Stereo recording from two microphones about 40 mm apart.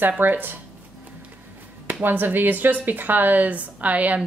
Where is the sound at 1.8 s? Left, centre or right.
Right.